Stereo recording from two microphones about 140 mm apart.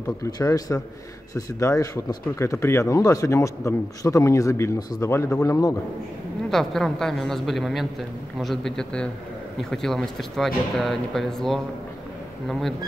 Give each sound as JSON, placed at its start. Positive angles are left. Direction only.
{"t": 0.2, "sound": "speech", "side_deg": 25}
{"t": 6.5, "sound": "speech", "side_deg": 5}